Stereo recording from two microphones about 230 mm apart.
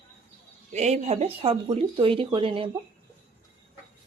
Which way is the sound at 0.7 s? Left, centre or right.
Right.